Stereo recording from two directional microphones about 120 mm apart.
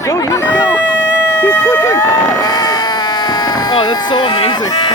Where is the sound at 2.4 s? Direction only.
35° left (ahead or behind).